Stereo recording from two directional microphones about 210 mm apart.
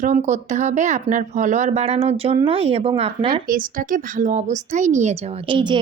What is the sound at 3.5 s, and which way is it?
A woman's voice, 40° right (ahead or behind).